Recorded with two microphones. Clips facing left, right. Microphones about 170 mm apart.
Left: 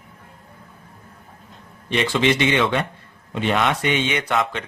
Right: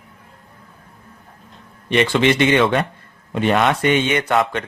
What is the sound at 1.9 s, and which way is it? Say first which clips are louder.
A man's voice: right 4 dB; 65° right (ahead or behind).